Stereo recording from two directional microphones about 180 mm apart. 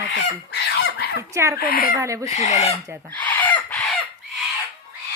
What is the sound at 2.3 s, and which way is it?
Speech, 40° left (ahead or behind).